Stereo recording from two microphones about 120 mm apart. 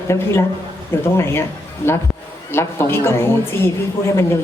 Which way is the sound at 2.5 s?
20° left (ahead or behind).